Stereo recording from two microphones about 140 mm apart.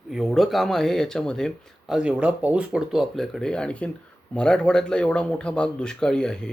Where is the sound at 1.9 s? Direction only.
5° right (ahead or behind).